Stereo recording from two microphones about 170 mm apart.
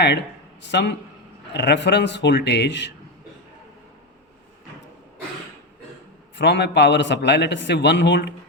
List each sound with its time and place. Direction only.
0.6 s a man's voice: 90° left
6.3 s a man's voice: 90° left